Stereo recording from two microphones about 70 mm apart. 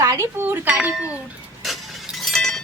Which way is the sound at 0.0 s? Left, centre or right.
Right.